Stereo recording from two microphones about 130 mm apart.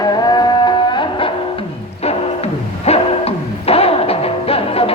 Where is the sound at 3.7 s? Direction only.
50° left (ahead or behind).